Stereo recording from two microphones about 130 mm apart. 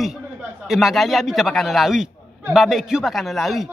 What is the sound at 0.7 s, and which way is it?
Speech, centre (ahead or behind).